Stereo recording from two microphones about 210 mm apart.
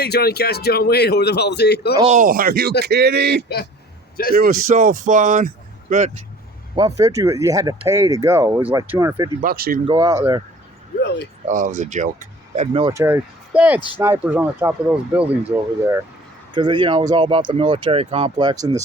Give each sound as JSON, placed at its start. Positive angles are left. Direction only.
{"t": 0.0, "sound": "a man's voice", "side_deg": 50}
{"t": 2.0, "sound": "speech", "side_deg": -40}
{"t": 4.4, "sound": "speech", "side_deg": -40}
{"t": 6.7, "sound": "speech", "side_deg": -20}
{"t": 9.4, "sound": "speech", "side_deg": -45}
{"t": 9.8, "sound": "speech", "side_deg": -20}
{"t": 11.4, "sound": "speech", "side_deg": -40}
{"t": 12.5, "sound": "speech", "side_deg": -25}
{"t": 12.9, "sound": "speech", "side_deg": -10}
{"t": 16.5, "sound": "speech", "side_deg": -20}